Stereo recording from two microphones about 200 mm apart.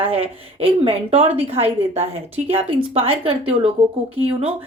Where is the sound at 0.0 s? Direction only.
30° right (ahead or behind).